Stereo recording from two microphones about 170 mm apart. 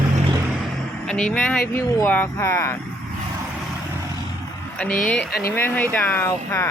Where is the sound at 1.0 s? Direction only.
5° left (ahead or behind).